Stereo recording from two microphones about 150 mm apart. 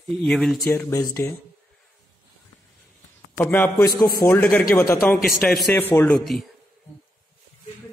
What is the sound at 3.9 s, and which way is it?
Speech, 25° left (ahead or behind).